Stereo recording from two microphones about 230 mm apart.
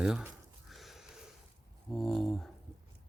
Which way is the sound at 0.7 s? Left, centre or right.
Centre.